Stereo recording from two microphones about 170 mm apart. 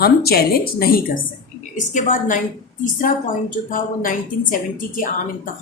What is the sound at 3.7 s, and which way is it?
A woman's voice, 55° left (ahead or behind).